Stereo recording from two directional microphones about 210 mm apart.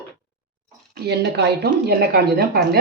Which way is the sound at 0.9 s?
55° right (ahead or behind).